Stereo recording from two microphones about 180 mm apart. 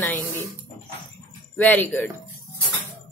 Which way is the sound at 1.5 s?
10° left (ahead or behind).